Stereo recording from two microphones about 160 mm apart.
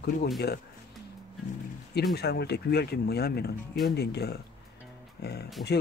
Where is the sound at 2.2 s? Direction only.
90° left.